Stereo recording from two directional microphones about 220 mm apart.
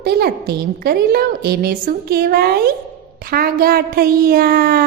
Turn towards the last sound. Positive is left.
turn(degrees=-40)  # may be behind; listen again after turning